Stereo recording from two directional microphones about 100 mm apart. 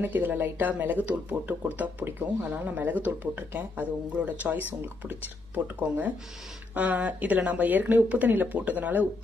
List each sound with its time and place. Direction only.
0.0 s speech: 20° right (ahead or behind)